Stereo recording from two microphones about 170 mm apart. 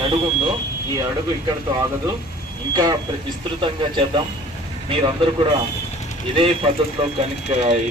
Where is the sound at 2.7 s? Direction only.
25° right (ahead or behind).